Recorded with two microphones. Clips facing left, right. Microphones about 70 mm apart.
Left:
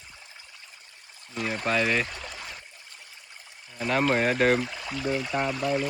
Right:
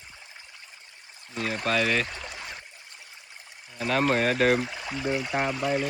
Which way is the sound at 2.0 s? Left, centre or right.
Centre.